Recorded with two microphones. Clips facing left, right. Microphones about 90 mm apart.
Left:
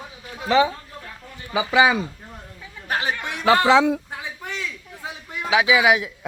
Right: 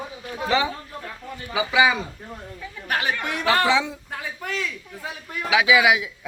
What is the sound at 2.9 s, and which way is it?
Speech, 30° left (ahead or behind).